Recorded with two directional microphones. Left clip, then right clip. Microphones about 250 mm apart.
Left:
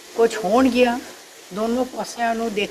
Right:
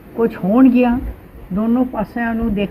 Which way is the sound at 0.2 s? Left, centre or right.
Centre.